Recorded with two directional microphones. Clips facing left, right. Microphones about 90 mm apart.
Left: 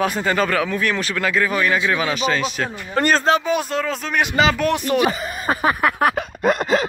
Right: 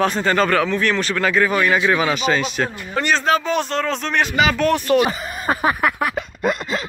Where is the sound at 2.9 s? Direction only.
45° left (ahead or behind).